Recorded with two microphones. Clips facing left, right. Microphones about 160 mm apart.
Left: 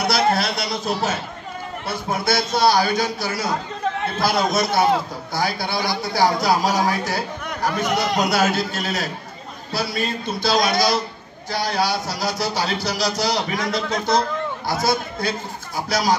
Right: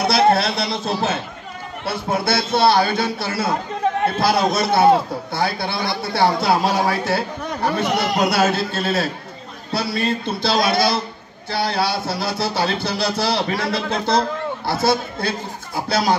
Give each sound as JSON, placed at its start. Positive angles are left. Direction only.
{"t": 0.0, "sound": "a man's voice", "side_deg": -25}